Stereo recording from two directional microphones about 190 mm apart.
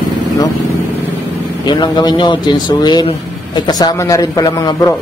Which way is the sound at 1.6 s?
25° left (ahead or behind).